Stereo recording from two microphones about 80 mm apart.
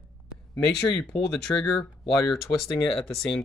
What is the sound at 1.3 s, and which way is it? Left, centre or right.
Speech, centre.